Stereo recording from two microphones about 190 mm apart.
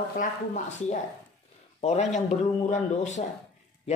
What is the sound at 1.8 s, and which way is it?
Speech, 35° left (ahead or behind).